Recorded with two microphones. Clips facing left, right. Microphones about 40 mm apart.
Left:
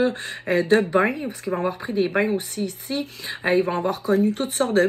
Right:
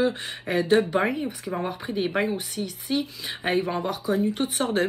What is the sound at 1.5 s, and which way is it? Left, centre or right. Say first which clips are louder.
Speech: left 7 dB; left.